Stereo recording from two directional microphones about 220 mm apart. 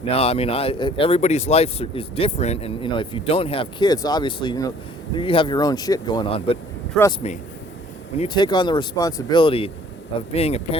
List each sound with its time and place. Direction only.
0.1 s speech: 25° left (ahead or behind)
7.0 s speech: 5° left (ahead or behind)
8.2 s speech: 20° left (ahead or behind)